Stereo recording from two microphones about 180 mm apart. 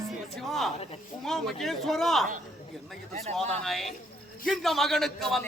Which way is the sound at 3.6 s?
Centre (ahead or behind).